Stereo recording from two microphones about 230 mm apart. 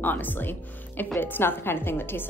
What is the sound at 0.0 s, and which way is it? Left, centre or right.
A woman's voice, centre.